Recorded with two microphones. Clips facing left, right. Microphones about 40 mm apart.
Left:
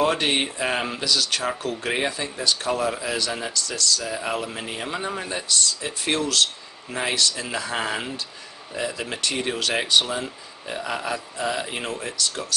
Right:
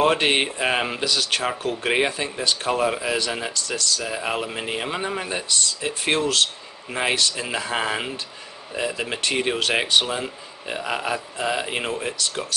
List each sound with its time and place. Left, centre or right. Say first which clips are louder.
0.0 s speech: right 2 dB; right
1.1 s speech: left 1 dB; right; by 5.3 s centre
5.3 s speech: even; right